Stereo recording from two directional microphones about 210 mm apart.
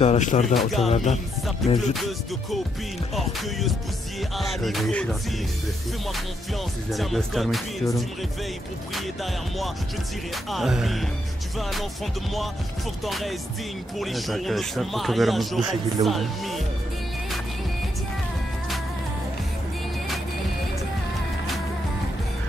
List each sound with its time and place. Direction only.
0.0 s speech: 35° left (ahead or behind)
0.6 s speech: centre (ahead or behind)
0.8 s speech: 30° left (ahead or behind)
1.6 s speech: centre (ahead or behind)
6.9 s speech: centre (ahead or behind)
13.0 s speech: centre (ahead or behind)